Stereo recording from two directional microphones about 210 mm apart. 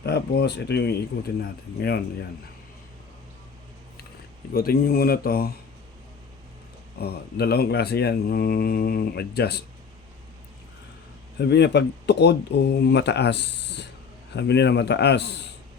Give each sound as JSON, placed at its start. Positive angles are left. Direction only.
{"t": 0.0, "sound": "speech", "side_deg": 50}
{"t": 4.5, "sound": "speech", "side_deg": 45}
{"t": 7.0, "sound": "speech", "side_deg": 50}
{"t": 11.3, "sound": "speech", "side_deg": 50}